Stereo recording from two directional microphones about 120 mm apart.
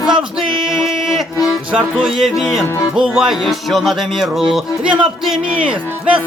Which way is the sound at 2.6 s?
25° left (ahead or behind).